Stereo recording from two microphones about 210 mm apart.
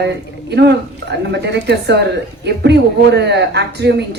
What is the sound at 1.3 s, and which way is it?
Speech, 55° right (ahead or behind).